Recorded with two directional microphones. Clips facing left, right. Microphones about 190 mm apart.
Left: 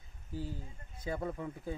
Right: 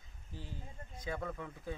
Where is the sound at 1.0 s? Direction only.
30° left (ahead or behind).